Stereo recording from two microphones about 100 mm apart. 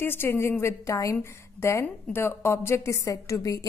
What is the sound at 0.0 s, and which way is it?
A woman's voice, 20° left (ahead or behind).